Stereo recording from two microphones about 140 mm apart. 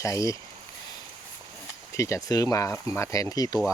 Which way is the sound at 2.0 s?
20° left (ahead or behind).